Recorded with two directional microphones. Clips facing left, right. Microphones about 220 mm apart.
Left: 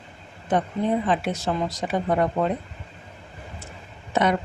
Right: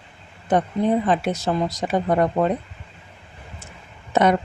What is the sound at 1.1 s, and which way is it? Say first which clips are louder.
Speech: right 3 dB; 40° right (ahead or behind).